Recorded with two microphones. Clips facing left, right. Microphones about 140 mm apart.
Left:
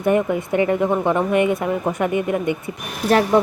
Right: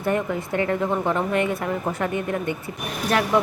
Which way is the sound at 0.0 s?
15° left (ahead or behind).